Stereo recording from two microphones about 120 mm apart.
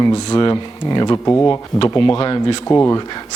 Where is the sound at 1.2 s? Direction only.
20° left (ahead or behind).